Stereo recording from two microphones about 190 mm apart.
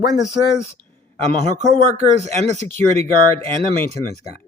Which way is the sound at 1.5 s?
35° right (ahead or behind).